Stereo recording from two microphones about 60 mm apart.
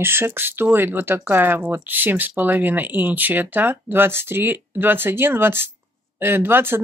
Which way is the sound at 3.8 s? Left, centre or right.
Right.